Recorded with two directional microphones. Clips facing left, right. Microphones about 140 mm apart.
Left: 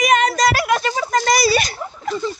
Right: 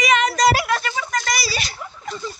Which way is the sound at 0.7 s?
25° left (ahead or behind).